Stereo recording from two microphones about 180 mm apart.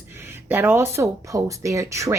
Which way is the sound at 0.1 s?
15° right (ahead or behind).